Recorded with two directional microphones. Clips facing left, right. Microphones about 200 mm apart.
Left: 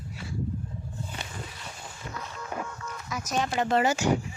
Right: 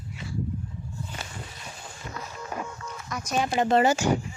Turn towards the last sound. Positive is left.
turn(degrees=-30)  # may be behind; listen again after turning